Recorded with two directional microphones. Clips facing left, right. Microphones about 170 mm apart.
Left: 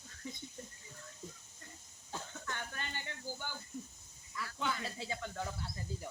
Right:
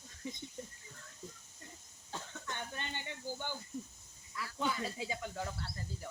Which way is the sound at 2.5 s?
20° right (ahead or behind).